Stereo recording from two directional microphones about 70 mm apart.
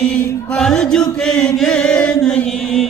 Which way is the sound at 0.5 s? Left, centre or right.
Centre.